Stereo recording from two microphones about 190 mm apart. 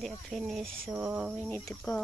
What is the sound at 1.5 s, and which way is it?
Speech, 10° left (ahead or behind).